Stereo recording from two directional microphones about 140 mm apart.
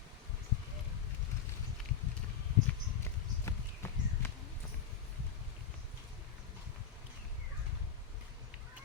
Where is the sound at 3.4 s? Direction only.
20° left (ahead or behind).